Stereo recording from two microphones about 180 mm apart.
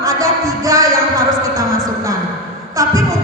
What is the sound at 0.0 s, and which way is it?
Music, 20° right (ahead or behind).